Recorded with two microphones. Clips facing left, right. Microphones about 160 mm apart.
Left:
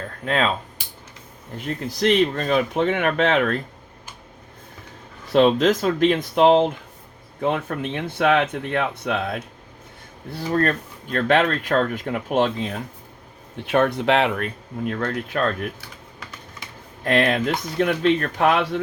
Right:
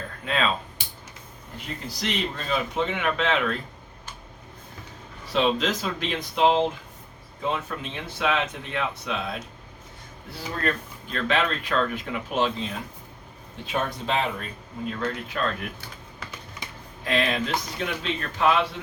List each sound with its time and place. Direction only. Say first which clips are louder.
1.6 s speech: left 10 dB; 55° left (ahead or behind)
5.3 s speech: left 7 dB; 50° left (ahead or behind)
10.5 s speech: left 7 dB; 45° left (ahead or behind)
13.7 s speech: left 9 dB; 65° left (ahead or behind)
17.0 s speech: left 5 dB; 55° left (ahead or behind)